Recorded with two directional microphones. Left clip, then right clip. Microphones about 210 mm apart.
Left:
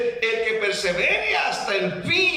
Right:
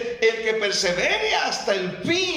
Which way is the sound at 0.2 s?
30° right (ahead or behind).